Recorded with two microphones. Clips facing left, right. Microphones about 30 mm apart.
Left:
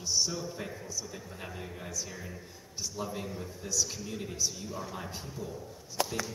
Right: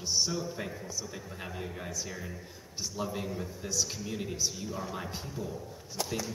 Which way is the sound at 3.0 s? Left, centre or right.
Centre.